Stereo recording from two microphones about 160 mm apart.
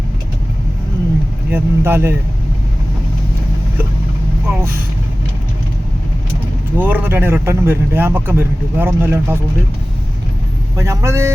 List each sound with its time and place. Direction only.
1.5 s a man's voice: 15° right (ahead or behind)
6.7 s a man's voice: 10° right (ahead or behind)
10.8 s a man's voice: 20° right (ahead or behind)